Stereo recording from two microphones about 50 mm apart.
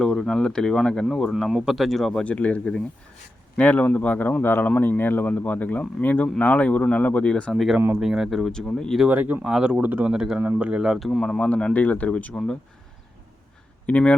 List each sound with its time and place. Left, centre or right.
0.0 s speech: centre
1.4 s speech: centre
2.1 s speech: left
4.4 s speech: left
7.5 s speech: centre
8.4 s speech: centre
9.0 s speech: right
9.4 s speech: centre
9.7 s speech: right
10.1 s speech: centre
11.0 s speech: centre
11.3 s speech: centre
11.7 s speech: left
13.8 s speech: left